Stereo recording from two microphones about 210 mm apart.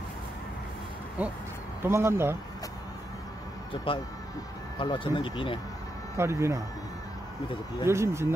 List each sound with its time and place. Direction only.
1.2 s speech: 5° right (ahead or behind)
3.7 s speech: 25° left (ahead or behind)
6.1 s speech: 15° right (ahead or behind)
7.8 s speech: 15° right (ahead or behind)